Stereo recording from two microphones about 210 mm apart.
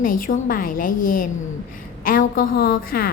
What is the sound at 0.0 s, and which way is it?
A woman's voice, 40° left (ahead or behind).